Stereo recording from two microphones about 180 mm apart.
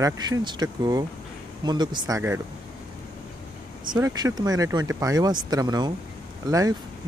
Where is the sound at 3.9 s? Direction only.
20° right (ahead or behind).